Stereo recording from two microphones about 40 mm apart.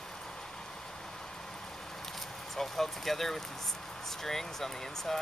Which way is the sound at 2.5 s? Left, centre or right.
Centre.